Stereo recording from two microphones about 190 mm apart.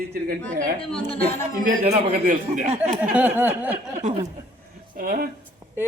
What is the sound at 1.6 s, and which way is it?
A man's voice, 45° right (ahead or behind).